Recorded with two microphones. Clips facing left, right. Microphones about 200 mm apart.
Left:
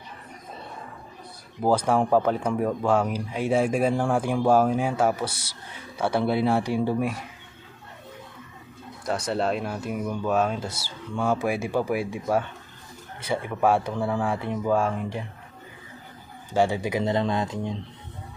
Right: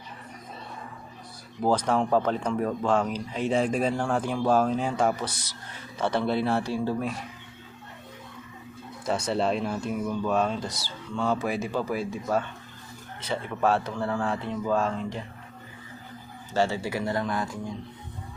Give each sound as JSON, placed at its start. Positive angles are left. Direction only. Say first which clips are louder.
{"t": 1.6, "sound": "speech", "louder": "left 2 dB", "side_deg": 10}
{"t": 9.0, "sound": "speech", "louder": "even", "side_deg": 0}
{"t": 16.6, "sound": "speech", "louder": "left 3 dB", "side_deg": 15}